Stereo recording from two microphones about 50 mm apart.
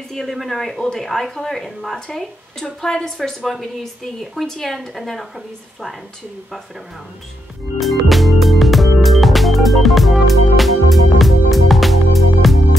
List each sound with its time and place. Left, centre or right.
0.1 s a woman's voice: centre
7.8 s music: centre